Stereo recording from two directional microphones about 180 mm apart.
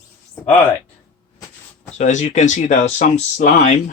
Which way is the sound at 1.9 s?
40° left (ahead or behind).